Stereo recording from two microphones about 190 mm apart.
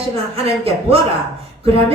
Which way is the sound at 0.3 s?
30° right (ahead or behind).